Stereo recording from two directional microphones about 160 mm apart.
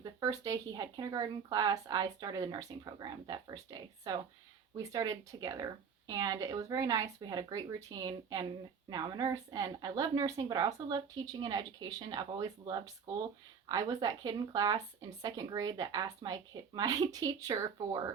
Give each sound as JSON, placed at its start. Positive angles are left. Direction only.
{"t": 0.0, "sound": "speech", "side_deg": -20}